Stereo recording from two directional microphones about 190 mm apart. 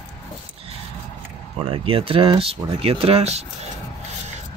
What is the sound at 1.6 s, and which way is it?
Speech, 30° right (ahead or behind).